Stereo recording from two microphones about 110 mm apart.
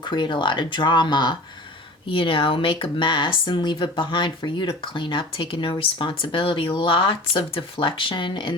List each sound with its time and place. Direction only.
0.0 s speech: 45° left (ahead or behind)